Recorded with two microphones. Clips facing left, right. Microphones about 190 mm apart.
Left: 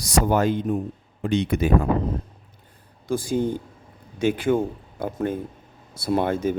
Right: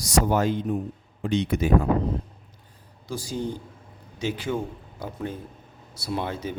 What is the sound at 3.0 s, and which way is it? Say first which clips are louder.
A man's voice: left 7 dB; 55° left (ahead or behind).